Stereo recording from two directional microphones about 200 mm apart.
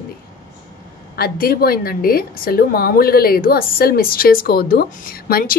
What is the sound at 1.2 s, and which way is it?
A woman's voice, 50° left (ahead or behind).